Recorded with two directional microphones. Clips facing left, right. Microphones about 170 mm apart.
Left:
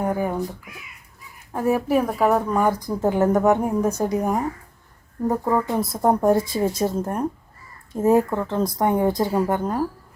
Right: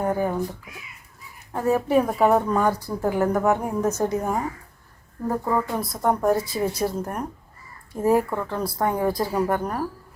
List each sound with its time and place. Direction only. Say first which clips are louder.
0.0 s speech: even; 10° left (ahead or behind)
1.5 s speech: left 1 dB; 15° left (ahead or behind)
1.9 s speech: right 2 dB; centre (ahead or behind)
2.6 s a woman's voice: left 2 dB; 15° left (ahead or behind)